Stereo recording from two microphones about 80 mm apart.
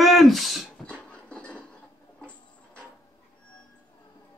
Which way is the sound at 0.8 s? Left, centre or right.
Centre.